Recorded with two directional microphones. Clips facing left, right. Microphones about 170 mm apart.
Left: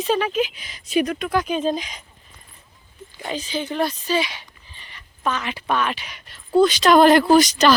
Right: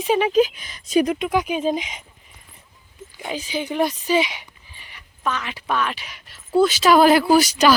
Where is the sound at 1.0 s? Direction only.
15° right (ahead or behind).